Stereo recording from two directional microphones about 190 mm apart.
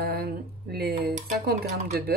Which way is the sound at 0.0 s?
55° right (ahead or behind).